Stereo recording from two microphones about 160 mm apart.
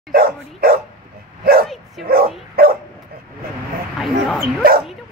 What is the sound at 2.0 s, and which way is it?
Speech, 70° right (ahead or behind).